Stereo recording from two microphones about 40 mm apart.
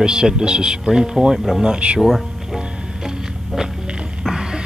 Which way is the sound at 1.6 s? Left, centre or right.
Right.